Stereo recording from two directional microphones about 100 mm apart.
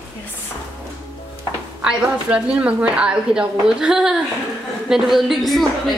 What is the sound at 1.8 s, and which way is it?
A woman's voice, 10° right (ahead or behind).